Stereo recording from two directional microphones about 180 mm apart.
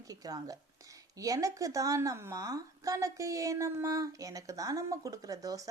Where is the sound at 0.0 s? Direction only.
20° right (ahead or behind).